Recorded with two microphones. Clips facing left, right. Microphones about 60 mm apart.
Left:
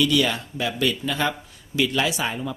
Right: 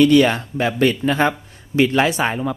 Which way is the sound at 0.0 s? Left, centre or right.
Right.